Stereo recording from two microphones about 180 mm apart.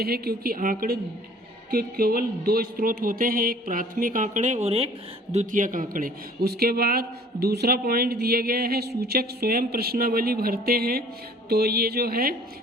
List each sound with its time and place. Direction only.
0.0 s a man's voice: 60° right (ahead or behind)